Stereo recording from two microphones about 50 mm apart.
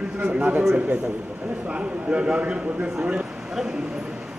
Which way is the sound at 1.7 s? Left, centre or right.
Right.